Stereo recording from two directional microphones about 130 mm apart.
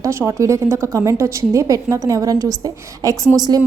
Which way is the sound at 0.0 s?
20° right (ahead or behind).